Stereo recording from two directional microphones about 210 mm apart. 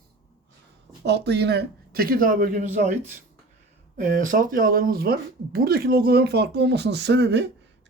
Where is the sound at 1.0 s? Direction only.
50° right (ahead or behind).